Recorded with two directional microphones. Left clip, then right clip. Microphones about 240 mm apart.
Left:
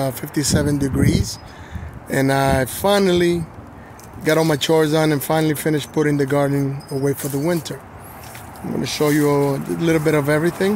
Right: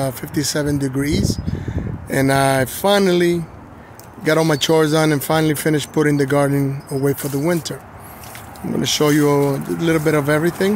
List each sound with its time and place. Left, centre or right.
0.0 s speech: centre
8.8 s speech: centre